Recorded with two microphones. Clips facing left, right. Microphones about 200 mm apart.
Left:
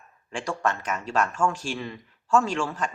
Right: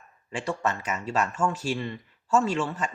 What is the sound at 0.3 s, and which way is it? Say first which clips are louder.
Speech: left 1 dB; 5° right (ahead or behind).